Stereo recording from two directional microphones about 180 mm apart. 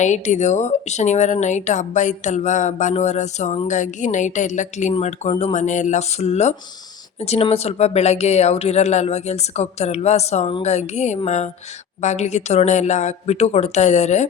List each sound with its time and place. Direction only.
0.0 s speech: 40° left (ahead or behind)